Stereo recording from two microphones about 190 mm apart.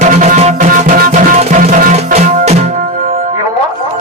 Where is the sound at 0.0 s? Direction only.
40° right (ahead or behind).